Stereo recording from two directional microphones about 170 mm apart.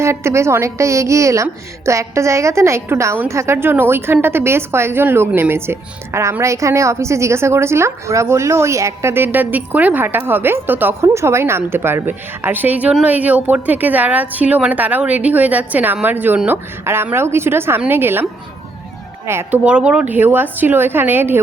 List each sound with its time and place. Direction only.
0.0 s a woman's voice: 15° right (ahead or behind)
19.3 s a woman's voice: 10° right (ahead or behind)